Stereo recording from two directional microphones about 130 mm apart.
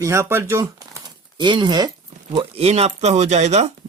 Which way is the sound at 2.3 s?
50° right (ahead or behind).